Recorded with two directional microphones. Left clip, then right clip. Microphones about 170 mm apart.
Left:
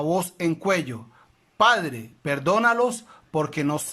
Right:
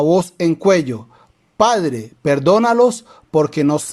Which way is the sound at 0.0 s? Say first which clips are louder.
Right 9 dB; 25° right (ahead or behind).